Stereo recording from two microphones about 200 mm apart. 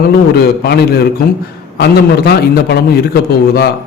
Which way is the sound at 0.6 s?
50° left (ahead or behind).